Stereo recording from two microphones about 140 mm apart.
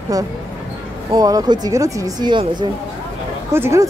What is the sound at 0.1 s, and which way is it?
Speech, 25° right (ahead or behind).